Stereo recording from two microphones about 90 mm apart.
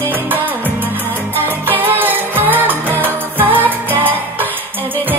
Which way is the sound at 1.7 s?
20° right (ahead or behind).